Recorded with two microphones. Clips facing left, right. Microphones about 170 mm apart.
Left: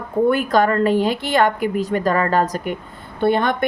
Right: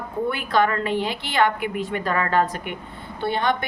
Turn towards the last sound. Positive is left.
turn(degrees=50)  # may be behind; listen again after turning